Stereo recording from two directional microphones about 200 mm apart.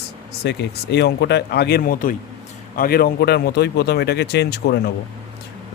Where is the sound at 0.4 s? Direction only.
55° left (ahead or behind).